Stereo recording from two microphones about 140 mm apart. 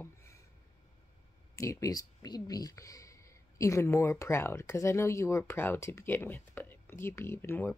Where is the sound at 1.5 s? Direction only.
20° left (ahead or behind).